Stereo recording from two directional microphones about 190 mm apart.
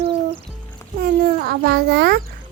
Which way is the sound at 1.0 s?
55° right (ahead or behind).